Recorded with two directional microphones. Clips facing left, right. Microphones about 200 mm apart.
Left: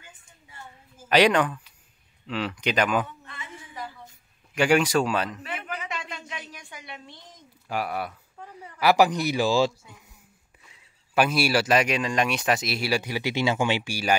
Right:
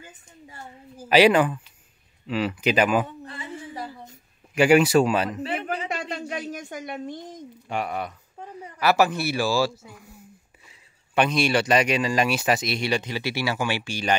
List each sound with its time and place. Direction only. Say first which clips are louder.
0.0 s a woman's voice: right 8 dB; 40° right (ahead or behind)
1.0 s speech: right 3 dB; 5° right (ahead or behind)
3.1 s a sound: right 7 dB; 35° right (ahead or behind)
4.6 s speech: right 4 dB; 5° right (ahead or behind)
5.4 s a sound: right 7 dB; 30° right (ahead or behind)
6.5 s a woman's voice: right 10 dB; 45° right (ahead or behind)
7.6 s speech: right 1 dB; 5° left (ahead or behind); by 9.7 s 20° left (ahead or behind)
11.1 s speech: right 1 dB; 5° left (ahead or behind)